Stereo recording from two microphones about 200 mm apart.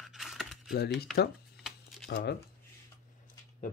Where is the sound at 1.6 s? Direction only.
Centre (ahead or behind).